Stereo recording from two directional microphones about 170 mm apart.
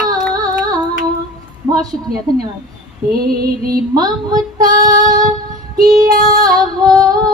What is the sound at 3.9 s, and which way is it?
Music, 20° right (ahead or behind).